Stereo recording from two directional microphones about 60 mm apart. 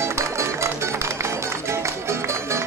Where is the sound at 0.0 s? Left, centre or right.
Right.